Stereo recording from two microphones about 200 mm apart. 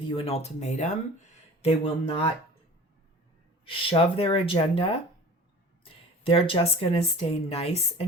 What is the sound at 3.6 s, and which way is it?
Speech, 25° left (ahead or behind).